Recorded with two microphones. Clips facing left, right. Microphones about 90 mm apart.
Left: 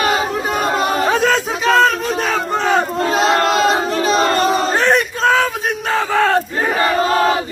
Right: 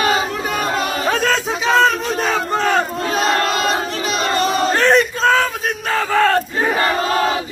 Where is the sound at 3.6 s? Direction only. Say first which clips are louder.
Left 4 dB; 30° left (ahead or behind).